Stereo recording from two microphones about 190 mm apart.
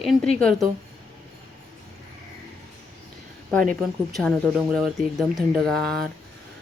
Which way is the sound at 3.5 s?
5° left (ahead or behind).